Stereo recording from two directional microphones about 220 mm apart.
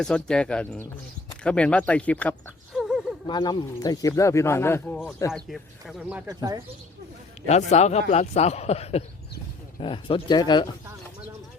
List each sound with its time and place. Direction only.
0.0 s speech: 5° left (ahead or behind)
2.7 s a sound: centre (ahead or behind)
3.2 s speech: 20° left (ahead or behind)
5.3 s speech: centre (ahead or behind)
7.4 s a man's voice: 30° left (ahead or behind)